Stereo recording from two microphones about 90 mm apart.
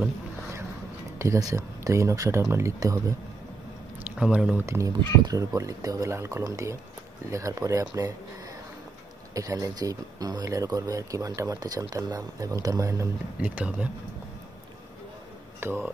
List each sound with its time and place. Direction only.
1.1 s speech: 35° right (ahead or behind)
4.0 s speech: 10° right (ahead or behind)
4.6 s speech: 30° right (ahead or behind)
9.3 s speech: 40° right (ahead or behind)
13.4 s speech: 15° right (ahead or behind)
15.6 s speech: 30° right (ahead or behind)